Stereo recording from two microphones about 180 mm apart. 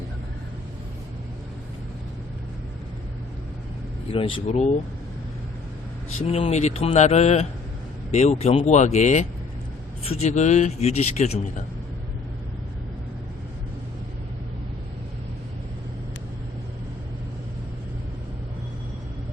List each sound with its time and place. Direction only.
4.1 s speech: 30° left (ahead or behind)
6.1 s speech: 35° left (ahead or behind)